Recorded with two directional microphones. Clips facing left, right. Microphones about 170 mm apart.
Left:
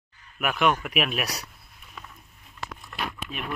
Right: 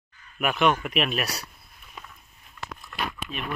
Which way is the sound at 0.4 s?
5° left (ahead or behind).